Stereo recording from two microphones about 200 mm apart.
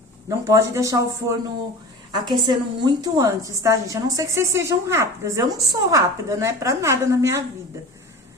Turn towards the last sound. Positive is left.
turn(degrees=-15)  # may be behind; listen again after turning